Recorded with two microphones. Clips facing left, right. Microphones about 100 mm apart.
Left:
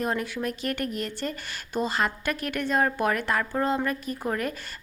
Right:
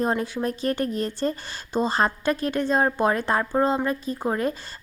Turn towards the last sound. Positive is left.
turn(degrees=-25)  # may be behind; listen again after turning